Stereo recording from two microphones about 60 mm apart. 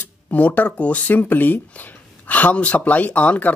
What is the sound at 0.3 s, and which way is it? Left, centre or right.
Speech, left.